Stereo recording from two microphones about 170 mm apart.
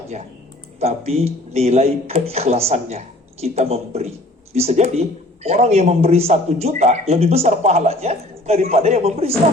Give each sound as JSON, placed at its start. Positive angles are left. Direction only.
{"t": 0.8, "sound": "speech", "side_deg": -35}